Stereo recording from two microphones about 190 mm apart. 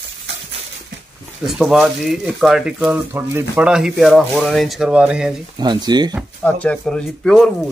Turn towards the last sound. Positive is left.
turn(degrees=5)  # may be behind; listen again after turning